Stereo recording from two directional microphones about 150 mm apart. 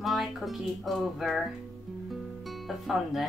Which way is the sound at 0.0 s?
Centre (ahead or behind).